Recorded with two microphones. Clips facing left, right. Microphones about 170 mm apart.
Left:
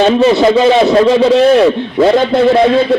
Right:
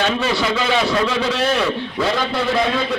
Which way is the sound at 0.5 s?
35° left (ahead or behind).